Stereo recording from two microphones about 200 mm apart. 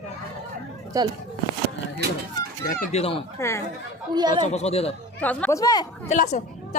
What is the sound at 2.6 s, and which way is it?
Speech, 40° left (ahead or behind).